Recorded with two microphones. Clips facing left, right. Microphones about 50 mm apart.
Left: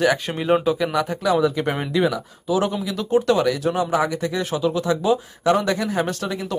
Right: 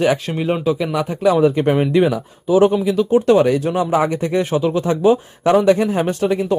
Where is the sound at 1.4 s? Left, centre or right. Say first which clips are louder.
Right 6 dB; right.